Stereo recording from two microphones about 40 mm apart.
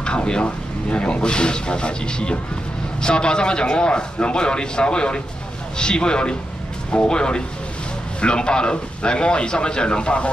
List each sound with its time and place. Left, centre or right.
0.0 s speech: left